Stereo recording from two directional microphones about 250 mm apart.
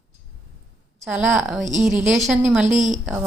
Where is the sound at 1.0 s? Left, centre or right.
Centre.